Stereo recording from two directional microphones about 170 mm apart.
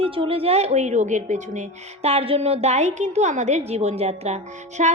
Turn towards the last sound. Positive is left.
turn(degrees=-40)  # may be behind; listen again after turning